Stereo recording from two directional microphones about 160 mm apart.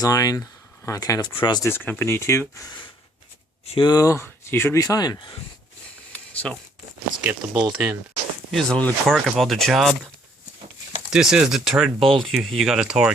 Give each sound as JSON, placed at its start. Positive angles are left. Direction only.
{"t": 0.0, "sound": "speech", "side_deg": 20}
{"t": 1.6, "sound": "speech", "side_deg": 15}
{"t": 3.7, "sound": "speech", "side_deg": 30}
{"t": 6.1, "sound": "a sound", "side_deg": 10}
{"t": 7.2, "sound": "speech", "side_deg": -5}
{"t": 8.4, "sound": "speech", "side_deg": 5}
{"t": 11.1, "sound": "speech", "side_deg": -5}